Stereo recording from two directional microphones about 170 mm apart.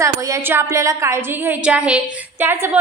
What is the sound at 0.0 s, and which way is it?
A woman's voice, 15° right (ahead or behind).